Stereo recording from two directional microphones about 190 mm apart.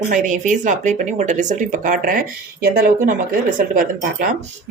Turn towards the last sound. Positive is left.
turn(degrees=-45)  # may be behind; listen again after turning